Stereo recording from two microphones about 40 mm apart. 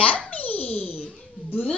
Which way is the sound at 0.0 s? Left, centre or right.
Left.